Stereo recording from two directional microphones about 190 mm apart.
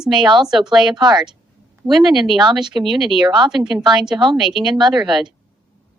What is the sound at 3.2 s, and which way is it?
Speech, 25° right (ahead or behind).